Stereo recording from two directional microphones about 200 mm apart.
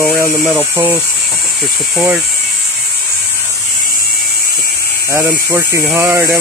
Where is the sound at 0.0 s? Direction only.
10° right (ahead or behind).